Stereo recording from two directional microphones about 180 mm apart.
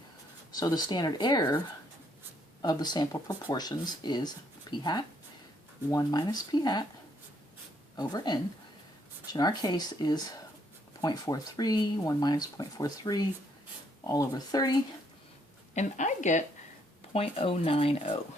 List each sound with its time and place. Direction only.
0.5 s speech: 20° left (ahead or behind)
7.9 s speech: 25° left (ahead or behind)
15.7 s a woman's voice: 40° left (ahead or behind)
17.1 s speech: 30° left (ahead or behind)